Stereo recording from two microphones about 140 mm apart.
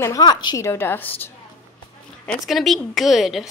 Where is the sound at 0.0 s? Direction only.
25° left (ahead or behind).